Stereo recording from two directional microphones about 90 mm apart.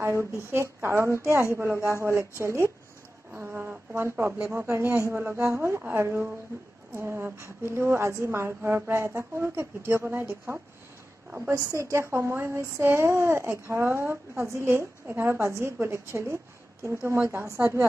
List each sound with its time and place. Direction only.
0.0 s a woman's voice: 30° right (ahead or behind)
4.3 s speech: 10° right (ahead or behind)
4.6 s a woman's voice: 30° right (ahead or behind)